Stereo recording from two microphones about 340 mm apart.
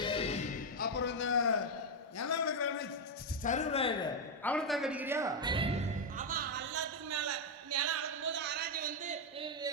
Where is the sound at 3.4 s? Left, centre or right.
Left.